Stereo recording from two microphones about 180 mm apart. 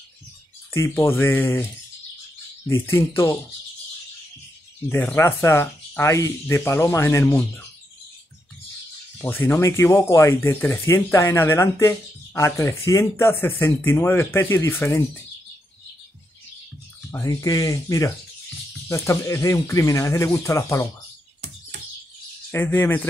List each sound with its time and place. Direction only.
0.7 s speech: 15° left (ahead or behind)
4.8 s speech: 10° left (ahead or behind)
9.2 s speech: 10° left (ahead or behind)
17.1 s speech: 15° left (ahead or behind)
22.5 s speech: 10° left (ahead or behind)